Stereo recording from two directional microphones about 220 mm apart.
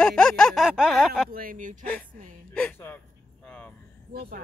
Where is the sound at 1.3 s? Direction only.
40° right (ahead or behind).